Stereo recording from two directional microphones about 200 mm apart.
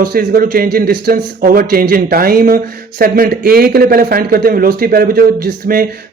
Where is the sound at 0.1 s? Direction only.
45° right (ahead or behind).